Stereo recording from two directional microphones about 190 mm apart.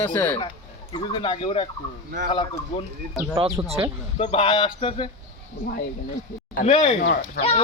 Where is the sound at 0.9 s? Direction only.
25° left (ahead or behind).